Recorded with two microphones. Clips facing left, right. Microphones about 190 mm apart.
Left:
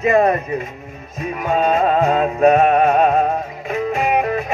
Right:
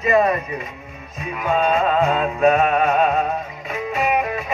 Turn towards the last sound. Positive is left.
turn(degrees=50)  # may be behind; listen again after turning